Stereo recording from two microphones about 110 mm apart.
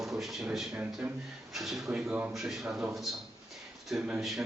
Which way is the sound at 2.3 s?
5° right (ahead or behind).